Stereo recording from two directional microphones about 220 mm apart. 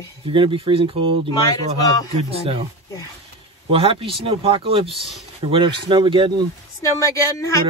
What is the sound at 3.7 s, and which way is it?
Speech, 25° right (ahead or behind).